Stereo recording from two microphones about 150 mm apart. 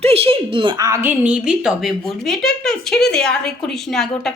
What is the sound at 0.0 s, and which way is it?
Speech, 40° right (ahead or behind).